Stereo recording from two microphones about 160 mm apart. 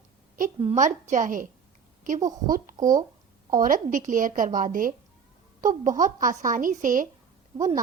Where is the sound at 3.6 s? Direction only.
60° right (ahead or behind).